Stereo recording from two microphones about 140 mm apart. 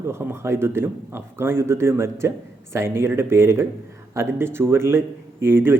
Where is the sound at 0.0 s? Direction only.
15° right (ahead or behind).